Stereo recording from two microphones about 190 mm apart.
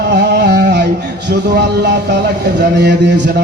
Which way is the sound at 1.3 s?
60° right (ahead or behind).